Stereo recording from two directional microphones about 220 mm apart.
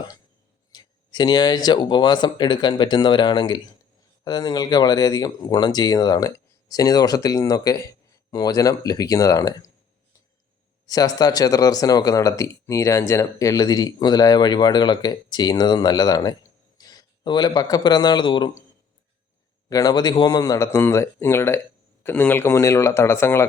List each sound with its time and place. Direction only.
0.7 s speech: 20° left (ahead or behind)
10.8 s speech: 15° left (ahead or behind)
19.7 s speech: 15° left (ahead or behind)